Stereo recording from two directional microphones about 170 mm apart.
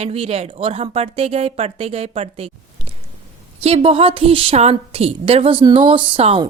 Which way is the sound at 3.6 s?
35° right (ahead or behind).